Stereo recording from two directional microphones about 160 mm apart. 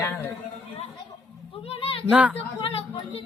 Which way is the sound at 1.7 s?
35° left (ahead or behind).